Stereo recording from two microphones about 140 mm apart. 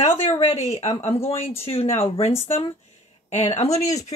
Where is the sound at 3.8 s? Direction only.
25° left (ahead or behind).